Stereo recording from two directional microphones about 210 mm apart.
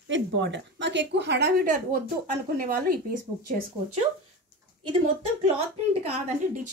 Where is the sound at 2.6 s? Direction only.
40° right (ahead or behind).